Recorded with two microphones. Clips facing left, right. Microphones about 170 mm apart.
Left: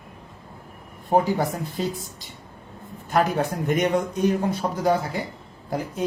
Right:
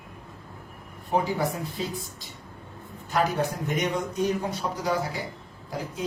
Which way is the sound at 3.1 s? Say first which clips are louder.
Left 3 dB; 50° left (ahead or behind).